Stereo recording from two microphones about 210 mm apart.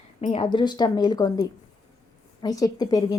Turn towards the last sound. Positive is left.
turn(degrees=20)  # may be behind; listen again after turning